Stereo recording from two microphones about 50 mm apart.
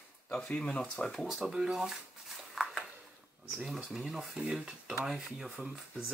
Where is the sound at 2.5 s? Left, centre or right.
Centre.